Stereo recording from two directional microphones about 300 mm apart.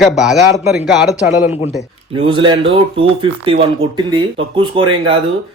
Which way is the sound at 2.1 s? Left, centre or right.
Centre.